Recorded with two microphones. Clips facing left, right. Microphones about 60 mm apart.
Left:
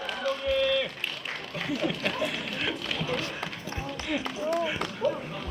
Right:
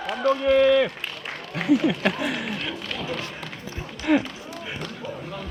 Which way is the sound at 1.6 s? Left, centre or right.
Right.